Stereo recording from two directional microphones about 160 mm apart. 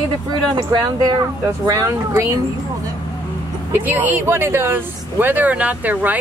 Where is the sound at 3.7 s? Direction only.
10° right (ahead or behind).